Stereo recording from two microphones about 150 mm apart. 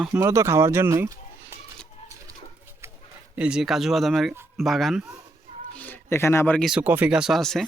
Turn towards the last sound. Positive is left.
turn(degrees=5)  # may be behind; listen again after turning